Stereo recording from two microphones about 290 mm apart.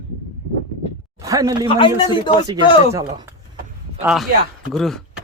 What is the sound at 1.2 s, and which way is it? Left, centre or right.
Speech, centre.